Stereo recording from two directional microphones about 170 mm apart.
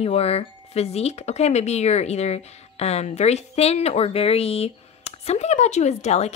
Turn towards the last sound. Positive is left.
turn(degrees=40)  # may be behind; listen again after turning